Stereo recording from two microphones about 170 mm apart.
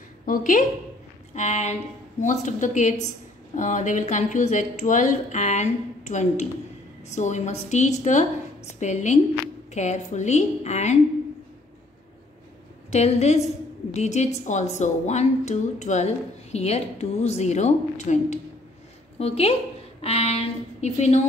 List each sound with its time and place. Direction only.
0.2 s speech: 50° left (ahead or behind)
12.9 s a woman's voice: 40° left (ahead or behind)